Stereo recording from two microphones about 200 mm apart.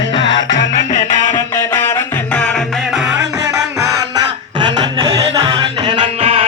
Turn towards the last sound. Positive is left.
turn(degrees=-25)  # may be behind; listen again after turning